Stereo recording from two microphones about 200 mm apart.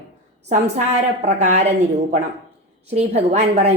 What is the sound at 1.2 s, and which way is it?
Speech, 35° right (ahead or behind).